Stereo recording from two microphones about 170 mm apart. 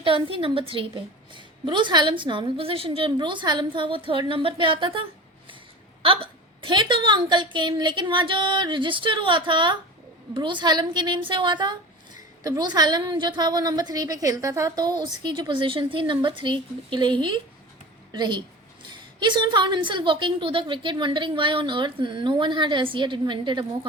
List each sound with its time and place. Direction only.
0.0 s a woman's voice: 30° right (ahead or behind)
6.6 s a woman's voice: 30° right (ahead or behind)